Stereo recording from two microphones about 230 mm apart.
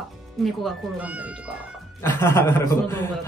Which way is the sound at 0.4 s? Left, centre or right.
Centre.